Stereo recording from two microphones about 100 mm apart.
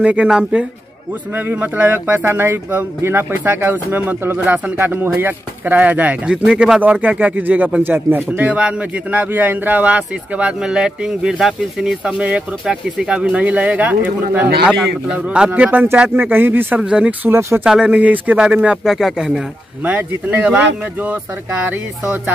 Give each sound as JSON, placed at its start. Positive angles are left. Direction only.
{"t": 0.0, "sound": "speech", "side_deg": -10}
{"t": 16.8, "sound": "speech", "side_deg": -10}
{"t": 17.3, "sound": "speech", "side_deg": -30}
{"t": 17.6, "sound": "speech", "side_deg": -10}